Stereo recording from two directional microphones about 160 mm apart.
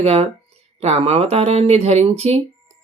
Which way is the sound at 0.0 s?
40° right (ahead or behind).